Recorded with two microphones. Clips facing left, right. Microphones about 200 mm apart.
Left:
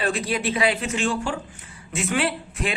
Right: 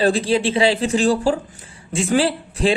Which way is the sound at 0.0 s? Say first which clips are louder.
Right 7 dB; 30° right (ahead or behind).